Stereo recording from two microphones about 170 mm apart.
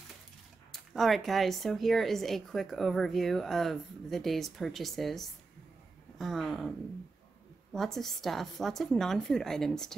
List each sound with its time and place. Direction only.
0.7 s speech: centre (ahead or behind)
7.7 s speech: centre (ahead or behind)